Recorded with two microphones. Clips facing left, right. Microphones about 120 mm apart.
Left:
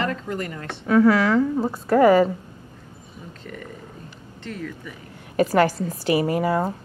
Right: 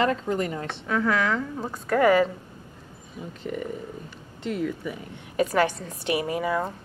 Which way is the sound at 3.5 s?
20° right (ahead or behind).